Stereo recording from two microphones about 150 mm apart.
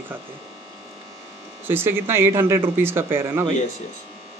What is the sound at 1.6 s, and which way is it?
Speech, 15° right (ahead or behind).